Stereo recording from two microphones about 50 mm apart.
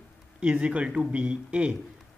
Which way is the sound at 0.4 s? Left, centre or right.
Right.